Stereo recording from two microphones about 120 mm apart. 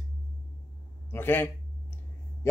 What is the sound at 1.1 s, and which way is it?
Speech, 20° left (ahead or behind).